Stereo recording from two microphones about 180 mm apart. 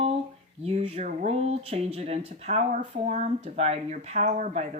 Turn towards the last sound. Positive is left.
turn(degrees=-45)  # may be behind; listen again after turning